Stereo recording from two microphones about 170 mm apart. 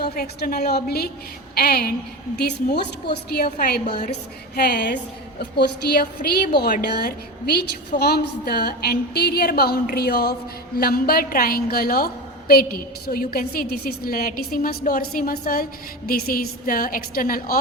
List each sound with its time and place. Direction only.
0.0 s a woman's voice: 65° left (ahead or behind)